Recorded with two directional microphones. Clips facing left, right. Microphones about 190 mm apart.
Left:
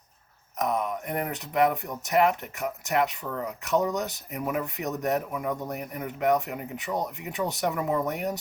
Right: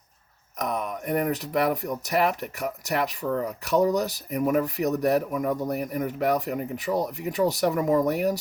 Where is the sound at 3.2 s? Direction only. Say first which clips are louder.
Right 6 dB; 35° right (ahead or behind).